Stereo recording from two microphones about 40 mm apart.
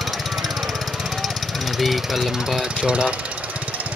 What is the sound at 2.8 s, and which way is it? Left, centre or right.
Speech, right.